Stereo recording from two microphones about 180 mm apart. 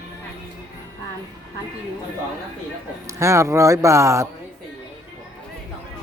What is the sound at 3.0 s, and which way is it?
Speech, 15° right (ahead or behind).